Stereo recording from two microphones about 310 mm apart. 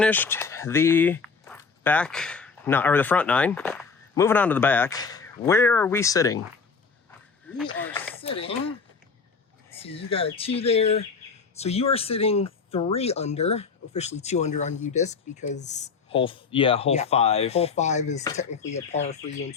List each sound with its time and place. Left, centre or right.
0.0 s speech: centre
7.8 s speech: centre
8.2 s speech: centre
9.7 s speech: centre